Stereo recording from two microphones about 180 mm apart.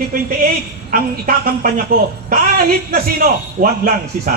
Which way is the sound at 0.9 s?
50° right (ahead or behind).